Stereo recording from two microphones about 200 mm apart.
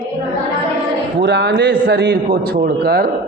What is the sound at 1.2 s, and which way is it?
A man's voice, 55° right (ahead or behind).